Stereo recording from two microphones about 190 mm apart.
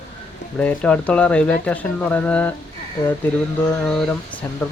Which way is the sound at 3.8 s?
5° left (ahead or behind).